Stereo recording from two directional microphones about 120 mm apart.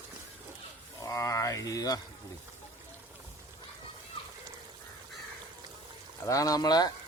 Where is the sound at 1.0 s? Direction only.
30° left (ahead or behind).